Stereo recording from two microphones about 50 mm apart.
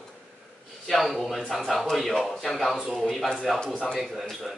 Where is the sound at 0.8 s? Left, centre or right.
Centre.